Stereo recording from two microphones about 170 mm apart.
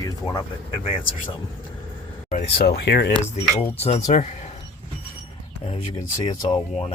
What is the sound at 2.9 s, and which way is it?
Cutlery, 65° left (ahead or behind).